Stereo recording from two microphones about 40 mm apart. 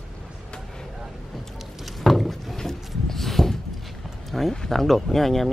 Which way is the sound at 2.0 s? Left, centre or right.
Centre.